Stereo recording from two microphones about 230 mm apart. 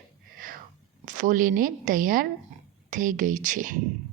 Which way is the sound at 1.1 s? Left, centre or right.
Right.